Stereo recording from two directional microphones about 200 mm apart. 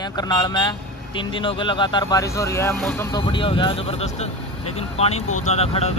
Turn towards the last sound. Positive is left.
turn(degrees=30)  # may be behind; listen again after turning